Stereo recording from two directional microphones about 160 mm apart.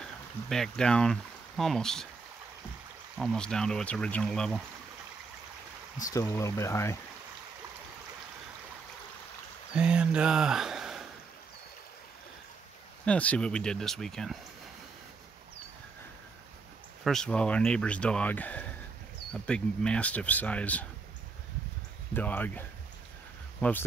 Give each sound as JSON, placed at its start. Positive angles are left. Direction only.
{"t": 0.0, "sound": "speech", "side_deg": 5}
{"t": 3.2, "sound": "speech", "side_deg": 5}
{"t": 6.1, "sound": "speech", "side_deg": 20}
{"t": 9.8, "sound": "speech", "side_deg": -5}
{"t": 13.0, "sound": "speech", "side_deg": 10}
{"t": 17.0, "sound": "speech", "side_deg": 5}
{"t": 22.1, "sound": "speech", "side_deg": 10}